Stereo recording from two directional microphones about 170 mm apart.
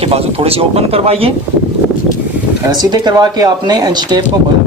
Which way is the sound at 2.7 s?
25° right (ahead or behind).